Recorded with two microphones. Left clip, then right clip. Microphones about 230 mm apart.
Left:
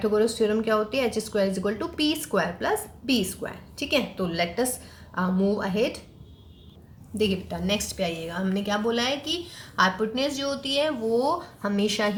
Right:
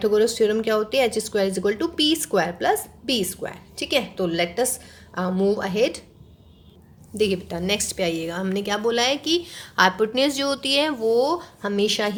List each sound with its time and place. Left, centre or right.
0.0 s speech: right
7.2 s speech: right